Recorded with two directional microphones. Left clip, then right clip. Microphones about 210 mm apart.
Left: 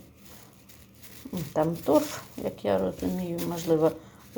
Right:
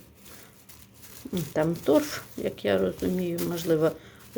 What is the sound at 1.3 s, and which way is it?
Speech, 20° right (ahead or behind).